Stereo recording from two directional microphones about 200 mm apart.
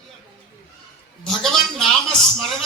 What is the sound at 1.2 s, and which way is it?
Speech, centre (ahead or behind).